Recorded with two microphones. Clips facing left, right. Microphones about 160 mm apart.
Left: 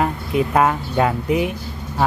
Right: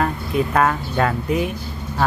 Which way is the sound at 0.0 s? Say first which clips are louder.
Left 1 dB; 15° left (ahead or behind).